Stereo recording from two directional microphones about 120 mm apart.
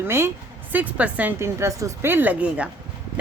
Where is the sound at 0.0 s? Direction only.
20° right (ahead or behind).